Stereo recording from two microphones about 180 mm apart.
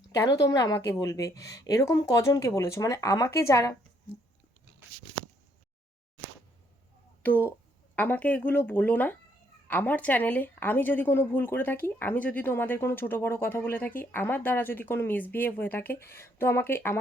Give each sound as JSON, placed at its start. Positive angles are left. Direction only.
{"t": 0.4, "sound": "a woman's voice", "side_deg": 20}
{"t": 7.9, "sound": "a woman's voice", "side_deg": 10}